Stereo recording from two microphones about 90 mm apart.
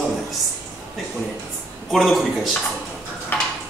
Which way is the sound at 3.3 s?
20° left (ahead or behind).